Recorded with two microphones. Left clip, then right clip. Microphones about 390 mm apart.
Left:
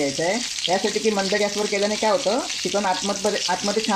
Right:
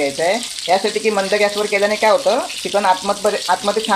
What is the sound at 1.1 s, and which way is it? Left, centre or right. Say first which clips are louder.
Speech: right 6 dB; right.